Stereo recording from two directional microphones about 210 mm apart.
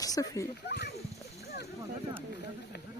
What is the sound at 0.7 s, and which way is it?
Splash, 50° left (ahead or behind).